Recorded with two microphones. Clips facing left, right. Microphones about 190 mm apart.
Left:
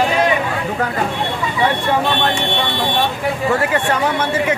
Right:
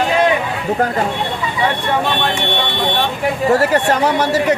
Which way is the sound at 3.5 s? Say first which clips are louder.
Right 5 dB; 40° right (ahead or behind).